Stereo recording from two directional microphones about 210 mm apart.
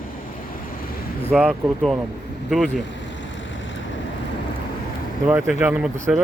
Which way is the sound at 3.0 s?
60° left (ahead or behind).